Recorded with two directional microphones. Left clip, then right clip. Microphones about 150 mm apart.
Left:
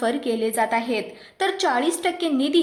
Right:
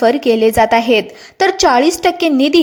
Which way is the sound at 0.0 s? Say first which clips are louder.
Right 12 dB; 40° right (ahead or behind).